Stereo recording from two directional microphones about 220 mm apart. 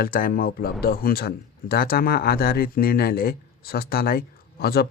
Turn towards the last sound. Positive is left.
turn(degrees=45)  # may be behind; listen again after turning